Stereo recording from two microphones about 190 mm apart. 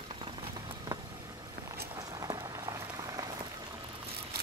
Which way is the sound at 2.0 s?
20° right (ahead or behind).